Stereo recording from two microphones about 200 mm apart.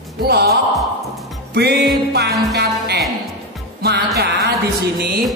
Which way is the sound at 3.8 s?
55° right (ahead or behind).